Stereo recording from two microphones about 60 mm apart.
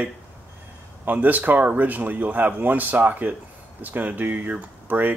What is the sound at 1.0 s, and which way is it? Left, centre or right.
Speech, right.